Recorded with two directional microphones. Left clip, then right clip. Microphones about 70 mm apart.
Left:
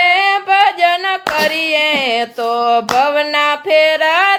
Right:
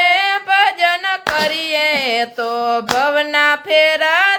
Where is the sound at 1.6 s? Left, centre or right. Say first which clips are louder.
Left 2 dB; left.